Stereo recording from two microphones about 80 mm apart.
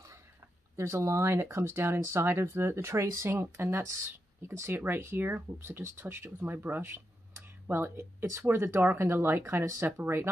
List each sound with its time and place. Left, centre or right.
0.7 s speech: right